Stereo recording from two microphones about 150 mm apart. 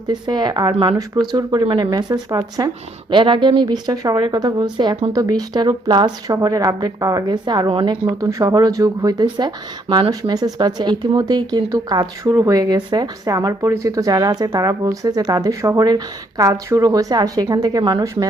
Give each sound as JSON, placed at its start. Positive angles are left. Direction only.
{"t": 0.1, "sound": "speech", "side_deg": -30}